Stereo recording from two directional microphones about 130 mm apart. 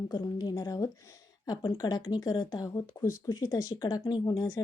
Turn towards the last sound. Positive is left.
turn(degrees=30)  # may be behind; listen again after turning